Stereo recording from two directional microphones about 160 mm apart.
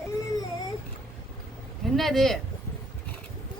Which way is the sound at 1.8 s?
Centre (ahead or behind).